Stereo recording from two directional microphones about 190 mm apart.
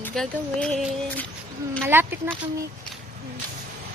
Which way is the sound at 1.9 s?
10° right (ahead or behind).